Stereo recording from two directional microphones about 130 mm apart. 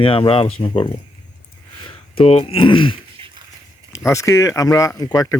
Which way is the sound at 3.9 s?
25° left (ahead or behind).